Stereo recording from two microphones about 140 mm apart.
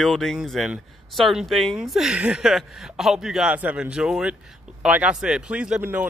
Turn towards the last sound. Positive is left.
turn(degrees=-10)  # may be behind; listen again after turning